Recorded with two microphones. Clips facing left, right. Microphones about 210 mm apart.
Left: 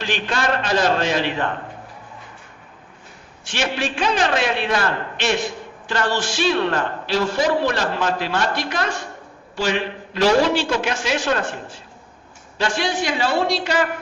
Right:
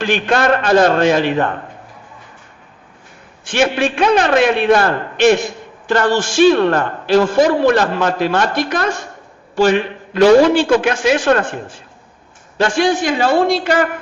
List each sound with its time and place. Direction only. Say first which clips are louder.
0.0 s a man's voice: right 8 dB; 55° right (ahead or behind)
3.4 s a man's voice: right 8 dB; 55° right (ahead or behind)